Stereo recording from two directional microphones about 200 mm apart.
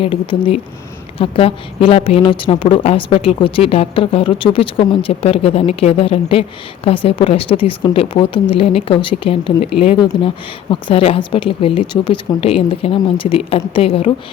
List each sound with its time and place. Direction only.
0.0 s a woman's voice: 25° left (ahead or behind)